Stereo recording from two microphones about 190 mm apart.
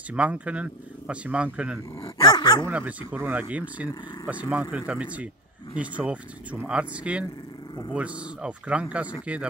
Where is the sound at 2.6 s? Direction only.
10° right (ahead or behind).